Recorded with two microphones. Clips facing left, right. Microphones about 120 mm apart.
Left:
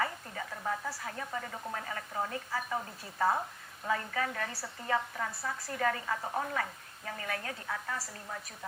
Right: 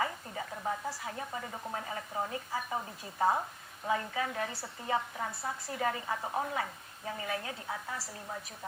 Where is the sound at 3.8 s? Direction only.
20° right (ahead or behind).